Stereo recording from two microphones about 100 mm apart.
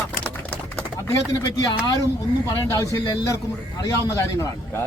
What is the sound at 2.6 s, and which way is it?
A man's voice, 30° left (ahead or behind).